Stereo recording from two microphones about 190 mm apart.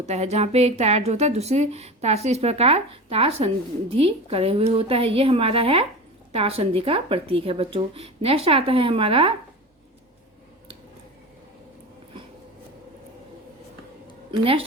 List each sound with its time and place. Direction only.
0.0 s a woman's voice: 35° right (ahead or behind)
14.3 s a woman's voice: 30° right (ahead or behind)